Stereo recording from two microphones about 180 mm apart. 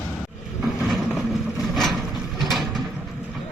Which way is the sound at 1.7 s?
Centre (ahead or behind).